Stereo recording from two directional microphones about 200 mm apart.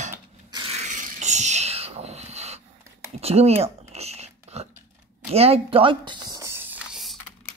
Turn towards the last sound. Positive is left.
turn(degrees=-5)  # may be behind; listen again after turning